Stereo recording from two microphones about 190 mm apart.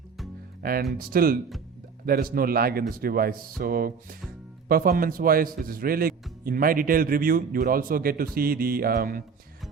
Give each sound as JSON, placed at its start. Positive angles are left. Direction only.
{"t": 0.6, "sound": "a man's voice", "side_deg": -50}